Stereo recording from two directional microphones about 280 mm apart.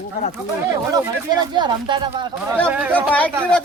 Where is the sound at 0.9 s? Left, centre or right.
Centre.